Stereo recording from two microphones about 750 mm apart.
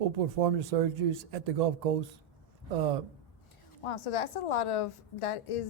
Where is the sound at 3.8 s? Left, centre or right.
Left.